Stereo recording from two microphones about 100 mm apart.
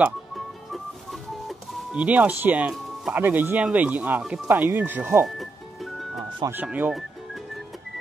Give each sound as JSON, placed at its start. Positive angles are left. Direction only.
{"t": 1.5, "sound": "speech", "side_deg": -10}
{"t": 5.2, "sound": "music", "side_deg": 0}
{"t": 6.5, "sound": "speech", "side_deg": -20}